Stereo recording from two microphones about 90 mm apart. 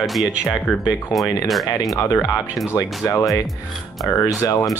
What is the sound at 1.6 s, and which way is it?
Speech, 40° left (ahead or behind).